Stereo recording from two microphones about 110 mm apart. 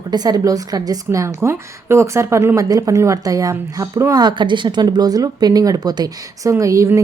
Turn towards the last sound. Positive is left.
turn(degrees=-30)  # may be behind; listen again after turning